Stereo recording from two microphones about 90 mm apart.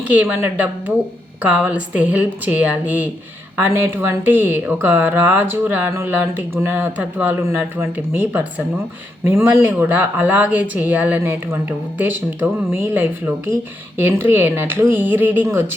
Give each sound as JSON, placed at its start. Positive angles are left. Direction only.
{"t": 0.3, "sound": "a woman's voice", "side_deg": -20}